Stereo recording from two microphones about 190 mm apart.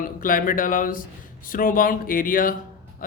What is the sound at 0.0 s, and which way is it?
A woman's voice, 45° left (ahead or behind).